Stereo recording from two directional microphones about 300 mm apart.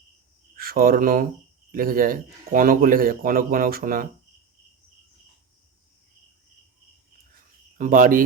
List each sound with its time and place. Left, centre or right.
0.5 s speech: right
7.8 s speech: right